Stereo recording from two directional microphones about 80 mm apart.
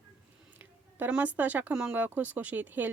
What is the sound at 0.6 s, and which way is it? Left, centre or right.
A woman's voice, right.